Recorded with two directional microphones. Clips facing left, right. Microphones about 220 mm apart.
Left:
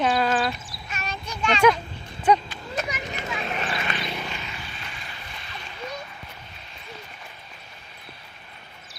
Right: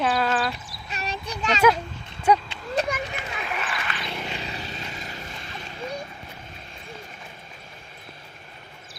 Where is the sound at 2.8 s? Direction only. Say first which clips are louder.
Right 5 dB; 30° right (ahead or behind).